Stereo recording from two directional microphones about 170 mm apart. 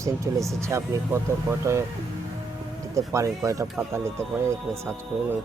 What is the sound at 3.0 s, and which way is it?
Speech, 20° right (ahead or behind).